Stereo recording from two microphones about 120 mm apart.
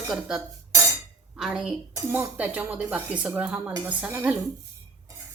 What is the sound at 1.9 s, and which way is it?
Speech, 20° right (ahead or behind).